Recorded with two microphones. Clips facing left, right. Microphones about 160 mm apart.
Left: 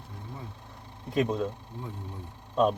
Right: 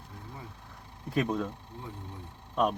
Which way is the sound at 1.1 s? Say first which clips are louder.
Left 2 dB; 25° left (ahead or behind).